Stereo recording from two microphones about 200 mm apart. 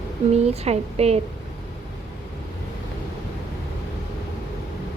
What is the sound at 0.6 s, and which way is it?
Speech, 30° right (ahead or behind).